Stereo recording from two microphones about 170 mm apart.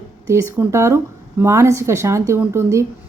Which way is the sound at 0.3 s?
15° right (ahead or behind).